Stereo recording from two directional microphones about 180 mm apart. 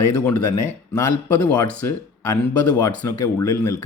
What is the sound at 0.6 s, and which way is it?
Speech, 15° left (ahead or behind).